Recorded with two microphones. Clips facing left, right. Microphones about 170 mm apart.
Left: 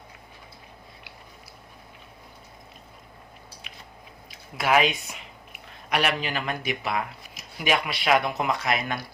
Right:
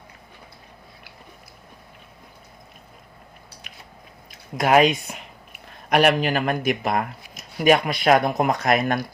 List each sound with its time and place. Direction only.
4.3 s speech: 45° right (ahead or behind)